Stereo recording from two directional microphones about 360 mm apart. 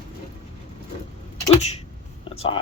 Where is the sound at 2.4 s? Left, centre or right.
Centre.